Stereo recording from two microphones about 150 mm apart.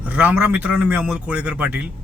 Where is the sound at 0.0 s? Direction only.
10° right (ahead or behind).